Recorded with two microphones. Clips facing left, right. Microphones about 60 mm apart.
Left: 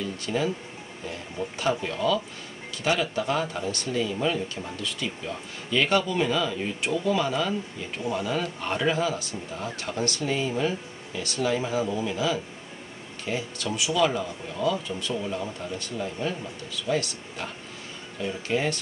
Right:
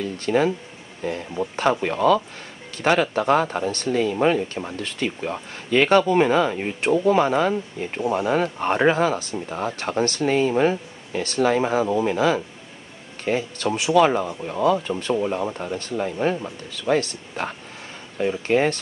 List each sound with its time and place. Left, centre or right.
0.0 s speech: right
9.5 s speech: right